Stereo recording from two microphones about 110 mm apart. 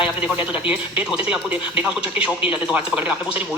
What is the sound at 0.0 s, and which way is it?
A man's voice, 15° right (ahead or behind).